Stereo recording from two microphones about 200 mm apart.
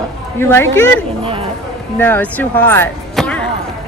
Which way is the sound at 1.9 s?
10° left (ahead or behind).